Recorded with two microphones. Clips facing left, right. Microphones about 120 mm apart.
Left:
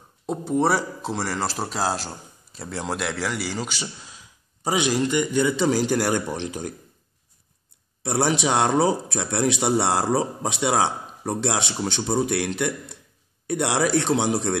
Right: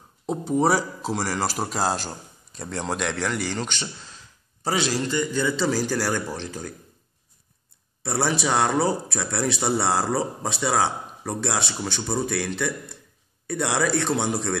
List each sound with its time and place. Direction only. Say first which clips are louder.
0.3 s speech: even; centre (ahead or behind); by 6.7 s 20° left (ahead or behind)
8.0 s speech: left 2 dB; 15° left (ahead or behind)